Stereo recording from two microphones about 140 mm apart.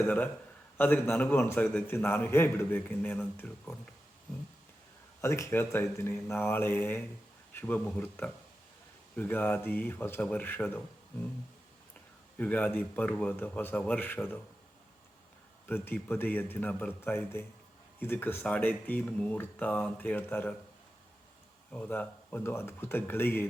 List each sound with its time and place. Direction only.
0.8 s a man's voice: 15° left (ahead or behind)
5.2 s a man's voice: 20° left (ahead or behind)
12.4 s a man's voice: 10° left (ahead or behind)
15.6 s a man's voice: 15° left (ahead or behind)
21.7 s a man's voice: 10° left (ahead or behind)